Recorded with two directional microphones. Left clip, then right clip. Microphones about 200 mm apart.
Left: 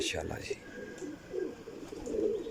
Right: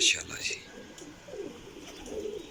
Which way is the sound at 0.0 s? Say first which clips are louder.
Right 8 dB; 40° left (ahead or behind).